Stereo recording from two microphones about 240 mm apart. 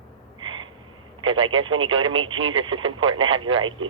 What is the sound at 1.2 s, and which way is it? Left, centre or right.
Speech, right.